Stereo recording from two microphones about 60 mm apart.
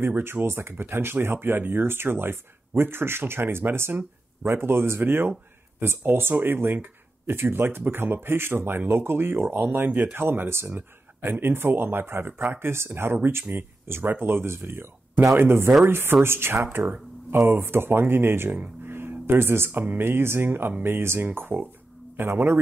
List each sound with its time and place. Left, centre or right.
0.0 s speech: right
18.9 s a sound: right
19.9 s speech: right